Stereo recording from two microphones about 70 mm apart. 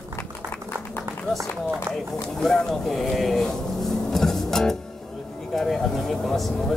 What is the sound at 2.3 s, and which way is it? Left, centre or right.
Speech, centre.